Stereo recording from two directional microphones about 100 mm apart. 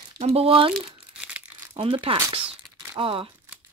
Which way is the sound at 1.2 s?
10° right (ahead or behind).